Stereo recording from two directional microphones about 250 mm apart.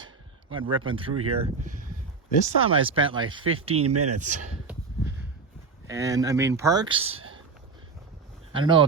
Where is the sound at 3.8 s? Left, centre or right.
Right.